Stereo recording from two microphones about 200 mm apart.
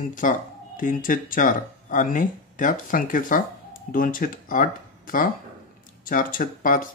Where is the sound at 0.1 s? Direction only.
40° left (ahead or behind).